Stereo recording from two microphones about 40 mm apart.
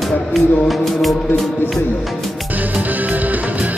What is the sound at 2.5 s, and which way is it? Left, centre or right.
Music, right.